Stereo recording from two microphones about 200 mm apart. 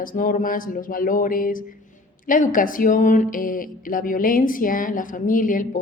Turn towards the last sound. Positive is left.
turn(degrees=40)  # may be behind; listen again after turning